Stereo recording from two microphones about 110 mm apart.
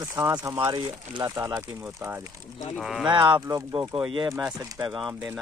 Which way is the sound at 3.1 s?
45° right (ahead or behind).